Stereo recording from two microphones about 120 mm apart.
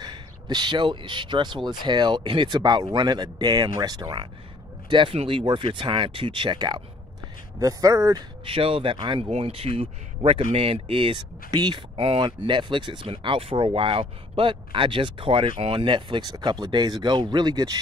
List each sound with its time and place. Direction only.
0.0 s speech: 40° right (ahead or behind)
5.1 s speech: 55° right (ahead or behind)
5.4 s speech: 40° right (ahead or behind)
7.6 s speech: 30° right (ahead or behind)
8.5 s speech: 50° right (ahead or behind); by 17.7 s 35° right (ahead or behind)